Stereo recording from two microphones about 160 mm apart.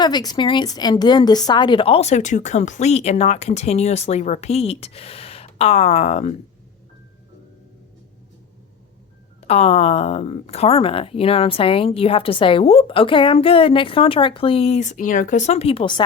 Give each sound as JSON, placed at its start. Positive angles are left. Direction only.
{"t": 0.0, "sound": "speech", "side_deg": 25}
{"t": 9.4, "sound": "speech", "side_deg": 40}